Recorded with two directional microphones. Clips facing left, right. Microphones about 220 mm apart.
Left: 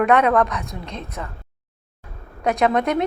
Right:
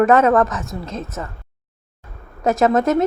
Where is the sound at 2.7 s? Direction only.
Centre (ahead or behind).